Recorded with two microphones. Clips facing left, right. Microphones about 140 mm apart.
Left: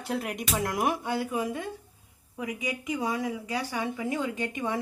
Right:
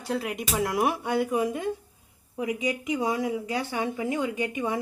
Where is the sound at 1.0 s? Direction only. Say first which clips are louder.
Right 4 dB; 20° right (ahead or behind).